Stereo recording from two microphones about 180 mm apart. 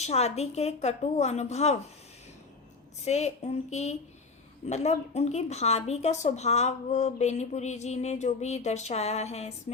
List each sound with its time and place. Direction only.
0.0 s a woman's voice: 35° left (ahead or behind)
3.0 s a woman's voice: 35° left (ahead or behind)